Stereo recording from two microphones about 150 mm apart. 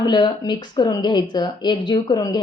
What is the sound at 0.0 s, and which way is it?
A woman's voice, 30° left (ahead or behind).